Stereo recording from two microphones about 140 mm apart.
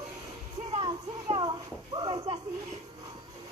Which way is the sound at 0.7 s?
40° right (ahead or behind).